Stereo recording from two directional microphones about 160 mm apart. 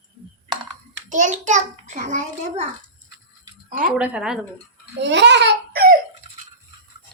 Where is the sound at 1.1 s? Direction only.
50° right (ahead or behind).